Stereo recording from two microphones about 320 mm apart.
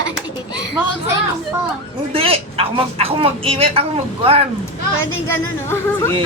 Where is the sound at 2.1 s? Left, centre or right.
Centre.